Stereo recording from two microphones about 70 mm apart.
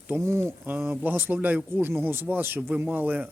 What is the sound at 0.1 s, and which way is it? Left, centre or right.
Speech, right.